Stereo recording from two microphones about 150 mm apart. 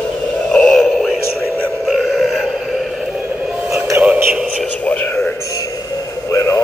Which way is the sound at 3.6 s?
5° right (ahead or behind).